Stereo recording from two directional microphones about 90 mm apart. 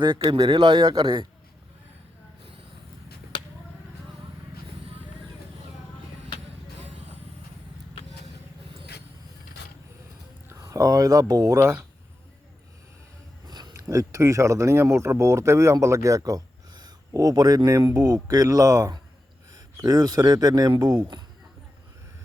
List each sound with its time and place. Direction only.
0.0 s speech: 55° right (ahead or behind)
3.3 s basketball bounce: 65° left (ahead or behind)
10.5 s speech: 40° right (ahead or behind)
13.5 s a sound: 50° right (ahead or behind)
13.7 s speech: 35° right (ahead or behind)